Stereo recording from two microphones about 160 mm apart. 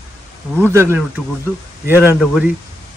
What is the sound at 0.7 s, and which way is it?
Speech, 15° right (ahead or behind).